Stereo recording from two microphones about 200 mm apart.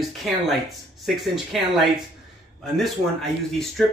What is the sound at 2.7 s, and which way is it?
Speech, centre (ahead or behind).